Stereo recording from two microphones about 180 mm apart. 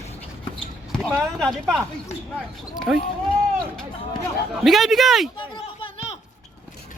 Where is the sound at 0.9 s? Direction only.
Centre (ahead or behind).